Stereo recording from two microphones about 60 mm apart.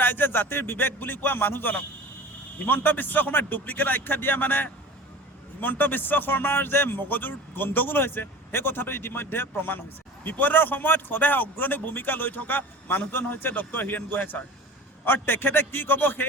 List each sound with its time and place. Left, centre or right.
0.0 s a man's voice: left